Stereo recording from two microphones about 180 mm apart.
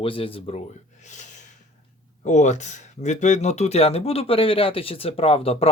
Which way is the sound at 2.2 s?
40° left (ahead or behind).